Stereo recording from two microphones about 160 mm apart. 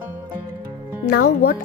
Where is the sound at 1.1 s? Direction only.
80° left.